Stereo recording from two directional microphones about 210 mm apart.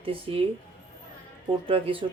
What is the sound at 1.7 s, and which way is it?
Speech, 25° right (ahead or behind).